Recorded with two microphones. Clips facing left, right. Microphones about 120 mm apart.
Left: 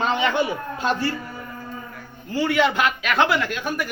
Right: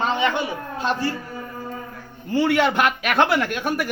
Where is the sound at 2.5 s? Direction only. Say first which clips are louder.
Left 2 dB; 55° right (ahead or behind).